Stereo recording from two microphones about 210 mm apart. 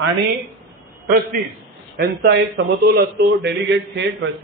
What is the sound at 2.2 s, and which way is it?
A man's voice, 50° right (ahead or behind).